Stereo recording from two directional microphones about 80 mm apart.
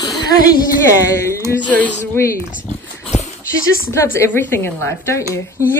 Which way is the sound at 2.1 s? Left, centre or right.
Left.